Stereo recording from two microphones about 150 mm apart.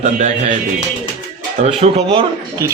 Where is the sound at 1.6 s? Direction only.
40° right (ahead or behind).